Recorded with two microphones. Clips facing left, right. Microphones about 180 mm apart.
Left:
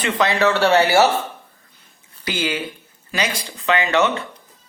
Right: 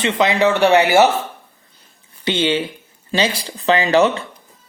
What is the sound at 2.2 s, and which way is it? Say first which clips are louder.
Speech: right 6 dB; 25° right (ahead or behind).